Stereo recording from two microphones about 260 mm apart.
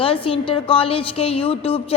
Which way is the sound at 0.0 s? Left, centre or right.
Left.